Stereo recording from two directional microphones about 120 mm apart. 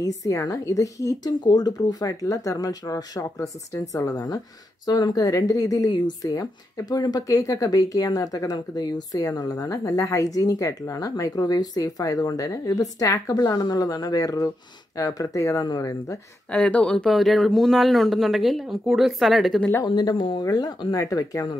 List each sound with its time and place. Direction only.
0.0 s speech: 25° left (ahead or behind)
16.4 s speech: 10° left (ahead or behind)
19.8 s speech: 35° left (ahead or behind)